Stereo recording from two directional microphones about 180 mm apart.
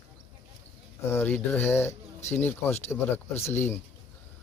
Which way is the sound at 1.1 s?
10° left (ahead or behind).